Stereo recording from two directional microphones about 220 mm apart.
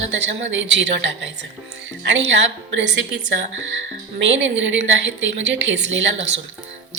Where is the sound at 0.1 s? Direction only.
55° right (ahead or behind).